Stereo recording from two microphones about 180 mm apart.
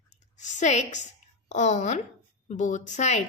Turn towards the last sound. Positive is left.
turn(degrees=40)  # may be behind; listen again after turning